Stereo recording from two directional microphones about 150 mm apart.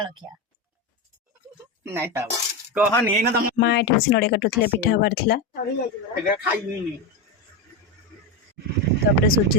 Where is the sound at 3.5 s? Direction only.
90° left.